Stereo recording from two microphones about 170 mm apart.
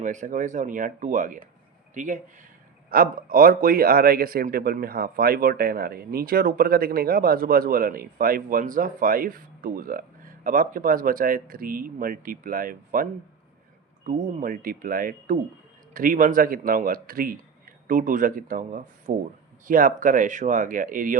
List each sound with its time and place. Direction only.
0.0 s speech: 45° right (ahead or behind)